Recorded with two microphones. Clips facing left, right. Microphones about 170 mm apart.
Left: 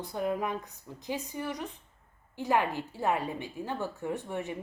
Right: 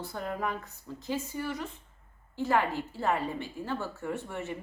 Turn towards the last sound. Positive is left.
turn(degrees=15)  # may be behind; listen again after turning